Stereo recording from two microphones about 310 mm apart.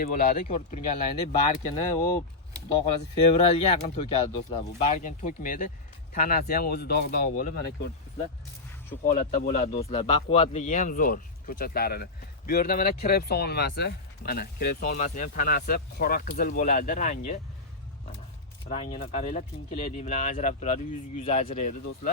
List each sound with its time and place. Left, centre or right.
0.0 s speech: left
3.3 s speech: left
18.7 s speech: centre